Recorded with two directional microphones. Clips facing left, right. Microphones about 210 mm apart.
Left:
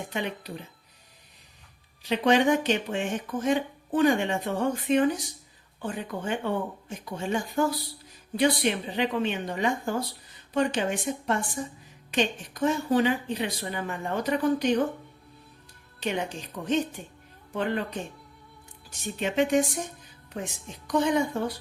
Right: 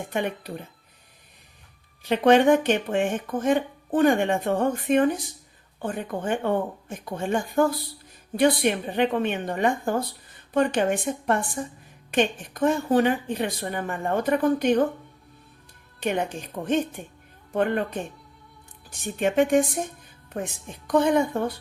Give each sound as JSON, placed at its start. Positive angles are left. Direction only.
{"t": 0.1, "sound": "speech", "side_deg": -55}
{"t": 2.0, "sound": "speech", "side_deg": -55}
{"t": 16.0, "sound": "a woman's voice", "side_deg": -55}